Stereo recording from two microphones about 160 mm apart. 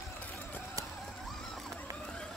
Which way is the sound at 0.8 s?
20° right (ahead or behind).